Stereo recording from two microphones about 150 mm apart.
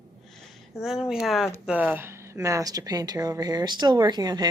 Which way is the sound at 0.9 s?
5° right (ahead or behind).